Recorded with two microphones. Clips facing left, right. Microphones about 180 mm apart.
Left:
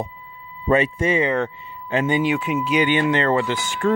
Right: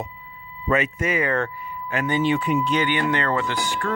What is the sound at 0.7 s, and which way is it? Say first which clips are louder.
Speech: left 4 dB; 30° left (ahead or behind).